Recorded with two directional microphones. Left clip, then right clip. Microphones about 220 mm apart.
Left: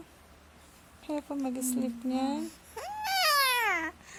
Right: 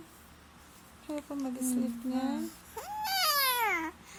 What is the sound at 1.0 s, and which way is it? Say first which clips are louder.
Speech: left 3 dB; 25° left (ahead or behind).